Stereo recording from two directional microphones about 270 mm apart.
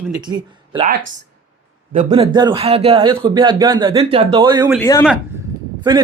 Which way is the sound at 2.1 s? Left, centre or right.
Centre.